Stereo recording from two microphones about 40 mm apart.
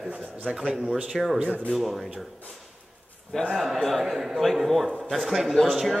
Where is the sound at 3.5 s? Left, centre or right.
Centre.